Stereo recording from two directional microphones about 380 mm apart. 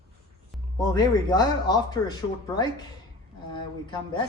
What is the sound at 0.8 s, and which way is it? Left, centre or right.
Speech, centre.